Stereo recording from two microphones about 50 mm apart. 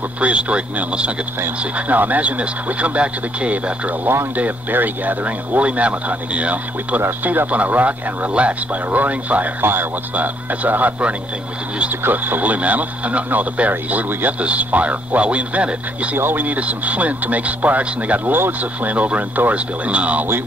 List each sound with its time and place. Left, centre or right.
0.2 s speech: right
1.6 s speech: right
4.4 s speech: right
10.1 s speech: right
16.2 s speech: right